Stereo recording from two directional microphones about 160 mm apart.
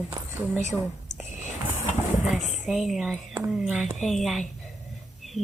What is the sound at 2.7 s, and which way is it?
Speech, centre (ahead or behind).